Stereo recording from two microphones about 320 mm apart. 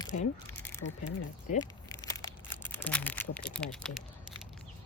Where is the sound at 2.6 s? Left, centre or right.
Centre.